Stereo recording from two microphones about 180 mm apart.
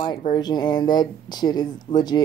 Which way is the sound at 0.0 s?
25° left (ahead or behind).